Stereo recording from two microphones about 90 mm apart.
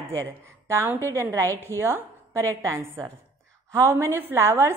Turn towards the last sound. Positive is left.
turn(degrees=-30)  # may be behind; listen again after turning